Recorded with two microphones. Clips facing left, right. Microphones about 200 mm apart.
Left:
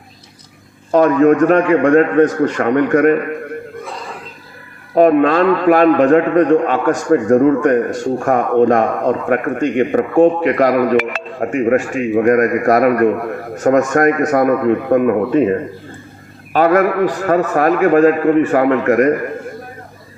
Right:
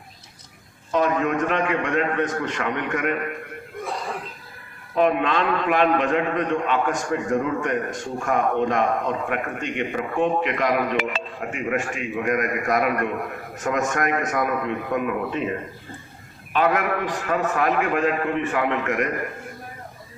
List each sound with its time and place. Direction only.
0.9 s speech: 45° left (ahead or behind)
4.9 s speech: 45° left (ahead or behind)